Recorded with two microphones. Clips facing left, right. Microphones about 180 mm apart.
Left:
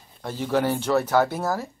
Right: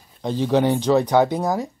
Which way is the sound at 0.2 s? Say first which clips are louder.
Right 5 dB; 20° right (ahead or behind).